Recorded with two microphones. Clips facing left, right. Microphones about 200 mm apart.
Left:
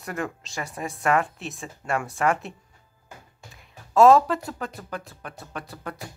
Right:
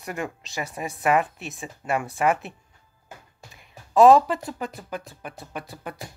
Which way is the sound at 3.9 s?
15° right (ahead or behind).